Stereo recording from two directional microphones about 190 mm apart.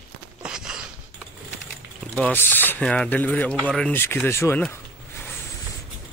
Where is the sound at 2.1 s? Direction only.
10° left (ahead or behind).